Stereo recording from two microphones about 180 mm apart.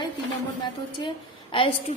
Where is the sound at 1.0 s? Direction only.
30° left (ahead or behind).